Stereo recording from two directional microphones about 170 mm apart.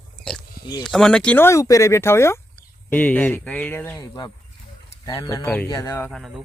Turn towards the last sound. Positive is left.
turn(degrees=0)  # may be behind; listen again after turning